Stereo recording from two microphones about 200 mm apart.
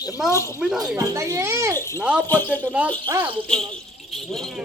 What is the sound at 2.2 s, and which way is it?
Speech, 10° left (ahead or behind).